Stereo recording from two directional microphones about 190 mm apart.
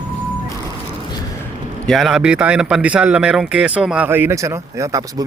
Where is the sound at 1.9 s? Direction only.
Centre (ahead or behind).